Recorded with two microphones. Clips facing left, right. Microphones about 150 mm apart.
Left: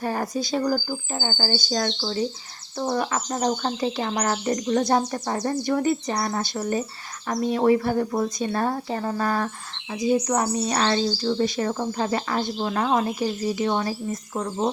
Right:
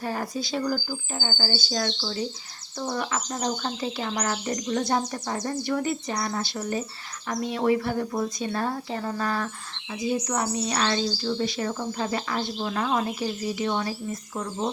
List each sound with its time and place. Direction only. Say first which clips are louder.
0.0 s speech: left 4 dB; 45° left (ahead or behind)
13.2 s speech: left 3 dB; 40° left (ahead or behind)